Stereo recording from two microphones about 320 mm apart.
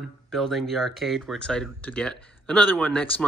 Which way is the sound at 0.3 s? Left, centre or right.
Centre.